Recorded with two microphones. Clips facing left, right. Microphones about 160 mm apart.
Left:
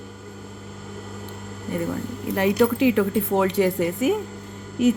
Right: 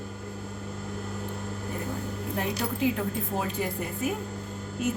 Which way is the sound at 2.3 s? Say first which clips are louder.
Left 12 dB; 80° left.